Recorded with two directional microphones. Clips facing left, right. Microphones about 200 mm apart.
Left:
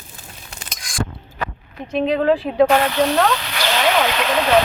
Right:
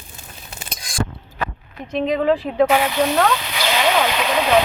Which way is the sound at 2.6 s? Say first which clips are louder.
Left 1 dB; 10° right (ahead or behind).